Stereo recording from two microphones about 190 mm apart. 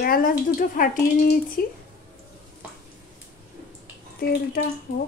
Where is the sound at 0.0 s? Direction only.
50° left (ahead or behind).